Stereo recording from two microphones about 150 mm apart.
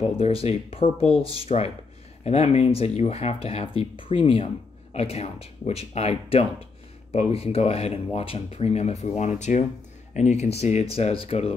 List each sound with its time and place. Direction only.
0.1 s speech: 40° left (ahead or behind)